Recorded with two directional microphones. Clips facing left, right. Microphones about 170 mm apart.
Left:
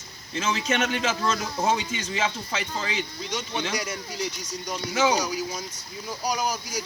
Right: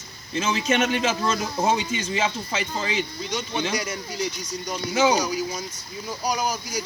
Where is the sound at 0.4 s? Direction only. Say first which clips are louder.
Right 3 dB; 10° right (ahead or behind).